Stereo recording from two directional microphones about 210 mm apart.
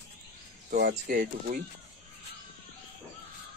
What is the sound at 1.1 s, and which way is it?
Speech, 40° right (ahead or behind).